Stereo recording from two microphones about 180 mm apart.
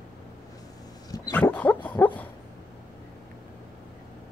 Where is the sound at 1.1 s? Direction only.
20° left (ahead or behind).